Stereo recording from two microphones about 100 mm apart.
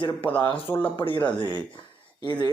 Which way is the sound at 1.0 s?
55° left (ahead or behind).